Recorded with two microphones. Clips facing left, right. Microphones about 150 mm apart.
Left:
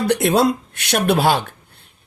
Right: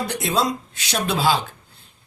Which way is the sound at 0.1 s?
65° left (ahead or behind).